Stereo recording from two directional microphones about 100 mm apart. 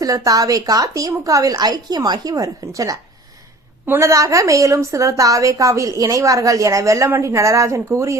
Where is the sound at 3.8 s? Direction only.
20° right (ahead or behind).